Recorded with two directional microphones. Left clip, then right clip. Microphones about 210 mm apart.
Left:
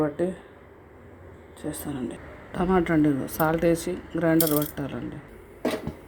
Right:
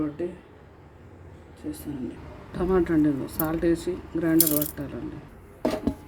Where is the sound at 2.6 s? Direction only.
25° left (ahead or behind).